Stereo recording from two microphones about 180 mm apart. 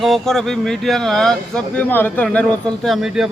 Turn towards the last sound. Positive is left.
turn(degrees=-5)  # may be behind; listen again after turning